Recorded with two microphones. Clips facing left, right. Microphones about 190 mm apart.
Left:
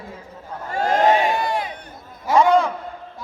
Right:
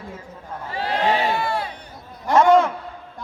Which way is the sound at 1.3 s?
15° left (ahead or behind).